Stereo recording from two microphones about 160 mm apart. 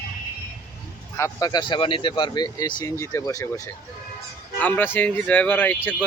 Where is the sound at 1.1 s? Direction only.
20° left (ahead or behind).